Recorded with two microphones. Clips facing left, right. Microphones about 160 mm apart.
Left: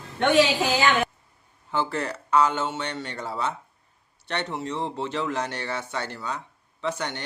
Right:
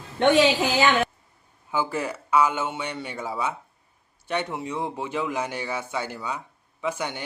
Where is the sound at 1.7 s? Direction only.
10° right (ahead or behind).